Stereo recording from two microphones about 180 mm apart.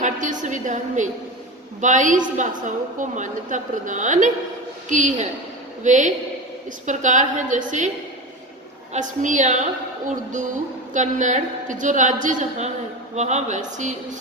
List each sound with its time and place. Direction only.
0.0 s a woman's voice: 45° right (ahead or behind)
8.9 s a woman's voice: 45° right (ahead or behind)
10.9 s a woman's voice: 45° right (ahead or behind)